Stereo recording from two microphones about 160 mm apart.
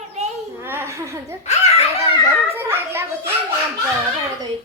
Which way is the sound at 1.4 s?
45° left (ahead or behind).